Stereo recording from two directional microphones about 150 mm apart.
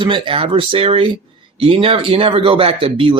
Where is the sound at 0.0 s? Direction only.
35° right (ahead or behind).